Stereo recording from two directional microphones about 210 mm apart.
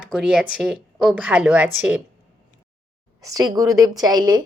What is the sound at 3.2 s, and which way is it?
A woman's voice, 15° right (ahead or behind).